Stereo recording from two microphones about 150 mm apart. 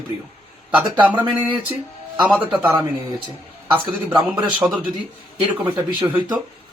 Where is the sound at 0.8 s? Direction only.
10° right (ahead or behind).